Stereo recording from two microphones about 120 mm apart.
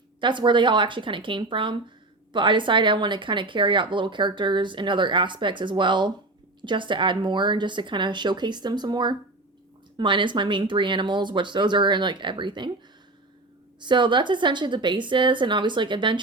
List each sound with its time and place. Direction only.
0.2 s speech: 40° right (ahead or behind)
13.8 s speech: 40° right (ahead or behind)